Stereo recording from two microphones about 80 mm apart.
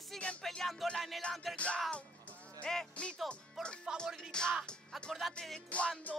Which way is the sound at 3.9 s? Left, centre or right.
Centre.